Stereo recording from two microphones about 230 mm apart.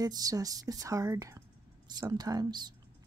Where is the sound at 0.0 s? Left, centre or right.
Centre.